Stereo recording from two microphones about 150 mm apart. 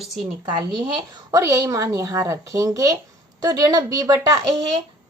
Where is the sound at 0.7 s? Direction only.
30° right (ahead or behind).